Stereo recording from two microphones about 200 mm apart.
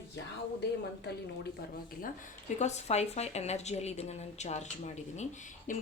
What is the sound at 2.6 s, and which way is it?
A woman's voice, 35° left (ahead or behind).